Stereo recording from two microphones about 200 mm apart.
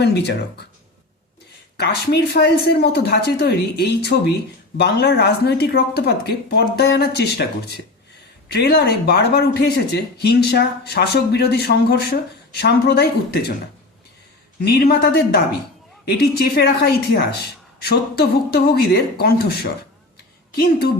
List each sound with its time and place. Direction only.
0.0 s speech: 55° left (ahead or behind)
1.7 s speech: 55° left (ahead or behind)
8.5 s speech: 50° left (ahead or behind)
14.6 s speech: 55° left (ahead or behind)